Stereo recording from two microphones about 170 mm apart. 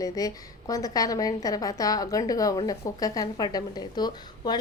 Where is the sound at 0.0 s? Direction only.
20° left (ahead or behind).